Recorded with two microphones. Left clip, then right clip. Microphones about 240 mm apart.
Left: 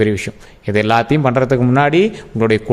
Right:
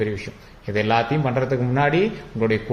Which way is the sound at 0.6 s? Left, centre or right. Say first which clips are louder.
Left 6 dB; left.